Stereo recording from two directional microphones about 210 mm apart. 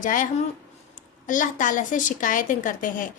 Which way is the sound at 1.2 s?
40° left (ahead or behind).